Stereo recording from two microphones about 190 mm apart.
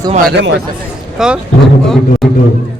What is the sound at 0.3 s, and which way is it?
Speech, 60° right (ahead or behind).